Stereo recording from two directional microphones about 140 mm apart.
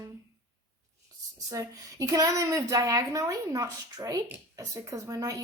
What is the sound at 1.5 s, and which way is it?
A woman's voice, 25° right (ahead or behind).